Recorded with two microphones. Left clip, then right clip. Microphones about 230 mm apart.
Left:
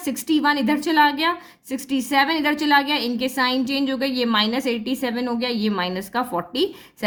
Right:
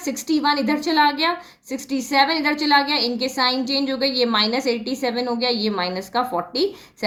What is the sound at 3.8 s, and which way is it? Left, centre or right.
A woman's voice, left.